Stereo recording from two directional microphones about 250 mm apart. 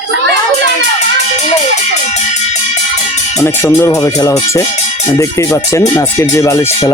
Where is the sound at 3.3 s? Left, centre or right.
Centre.